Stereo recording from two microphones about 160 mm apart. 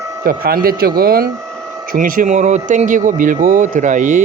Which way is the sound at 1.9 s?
55° right (ahead or behind).